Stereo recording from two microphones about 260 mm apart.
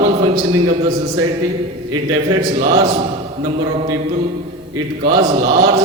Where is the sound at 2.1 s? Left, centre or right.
Centre.